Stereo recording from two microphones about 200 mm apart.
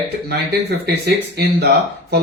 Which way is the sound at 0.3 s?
55° right (ahead or behind).